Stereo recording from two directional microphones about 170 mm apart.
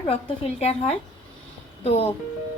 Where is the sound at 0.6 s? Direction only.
40° left (ahead or behind).